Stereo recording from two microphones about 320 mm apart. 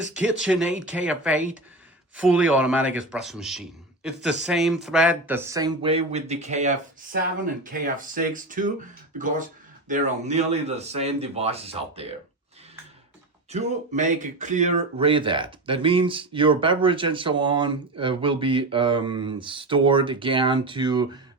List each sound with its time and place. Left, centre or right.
0.1 s speech: centre; by 8.7 s right
9.9 s speech: right
13.5 s speech: right